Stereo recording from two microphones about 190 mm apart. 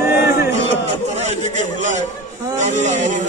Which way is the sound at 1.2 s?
40° right (ahead or behind).